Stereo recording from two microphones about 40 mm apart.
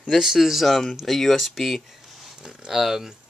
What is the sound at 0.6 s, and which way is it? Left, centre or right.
Speech, centre.